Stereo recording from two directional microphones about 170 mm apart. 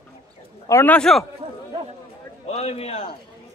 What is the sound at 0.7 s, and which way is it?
Speech, 10° left (ahead or behind).